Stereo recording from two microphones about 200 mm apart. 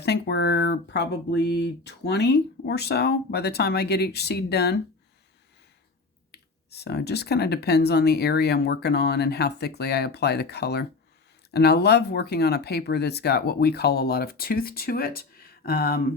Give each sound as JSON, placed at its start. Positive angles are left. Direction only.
{"t": 0.0, "sound": "speech", "side_deg": 55}
{"t": 6.3, "sound": "speech", "side_deg": 55}